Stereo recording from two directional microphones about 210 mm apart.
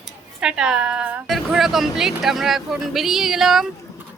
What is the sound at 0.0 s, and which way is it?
Speech, 5° right (ahead or behind).